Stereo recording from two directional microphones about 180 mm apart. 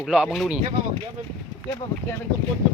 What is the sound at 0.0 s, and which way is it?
Speech, centre (ahead or behind).